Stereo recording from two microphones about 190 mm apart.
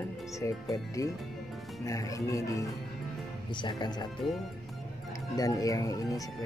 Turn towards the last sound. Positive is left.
turn(degrees=20)  # may be behind; listen again after turning